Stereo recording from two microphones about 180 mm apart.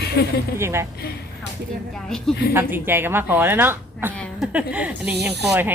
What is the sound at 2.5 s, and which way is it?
Speech, 10° right (ahead or behind).